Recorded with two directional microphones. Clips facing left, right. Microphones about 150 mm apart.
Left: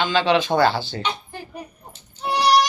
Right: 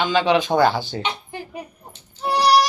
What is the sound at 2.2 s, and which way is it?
Baby cry, 10° right (ahead or behind).